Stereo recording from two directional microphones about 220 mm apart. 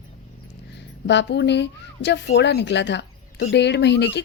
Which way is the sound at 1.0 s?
50° left (ahead or behind).